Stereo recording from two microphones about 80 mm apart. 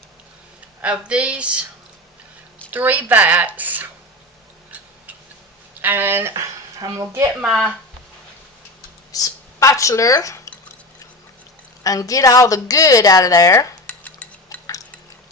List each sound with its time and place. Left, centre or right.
0.8 s speech: centre
2.6 s speech: right
5.8 s speech: right
6.7 s speech: right
7.4 s speech: centre
9.1 s speech: left
11.8 s a woman's voice: left
13.8 s dishes: centre